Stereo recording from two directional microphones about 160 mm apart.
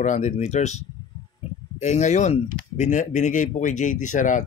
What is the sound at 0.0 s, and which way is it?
Speech, 50° left (ahead or behind).